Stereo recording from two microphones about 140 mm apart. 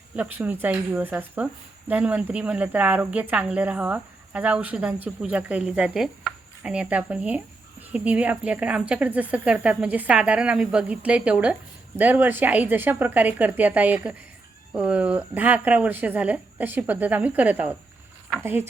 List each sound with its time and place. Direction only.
0.2 s speech: 10° right (ahead or behind)